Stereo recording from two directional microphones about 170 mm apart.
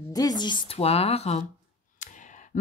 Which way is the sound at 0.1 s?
20° left (ahead or behind).